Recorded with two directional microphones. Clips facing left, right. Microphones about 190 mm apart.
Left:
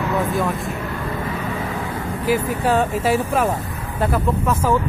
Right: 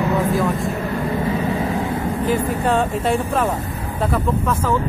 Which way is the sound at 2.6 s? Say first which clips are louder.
Even; 5° left (ahead or behind).